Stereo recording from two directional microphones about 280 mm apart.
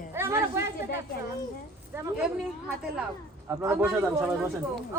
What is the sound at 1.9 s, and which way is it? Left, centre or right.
Speech, centre.